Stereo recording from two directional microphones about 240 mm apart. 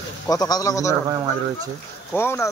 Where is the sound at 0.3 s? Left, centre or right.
Centre.